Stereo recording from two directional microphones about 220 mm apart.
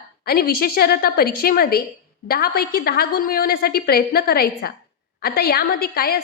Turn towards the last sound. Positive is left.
turn(degrees=45)  # may be behind; listen again after turning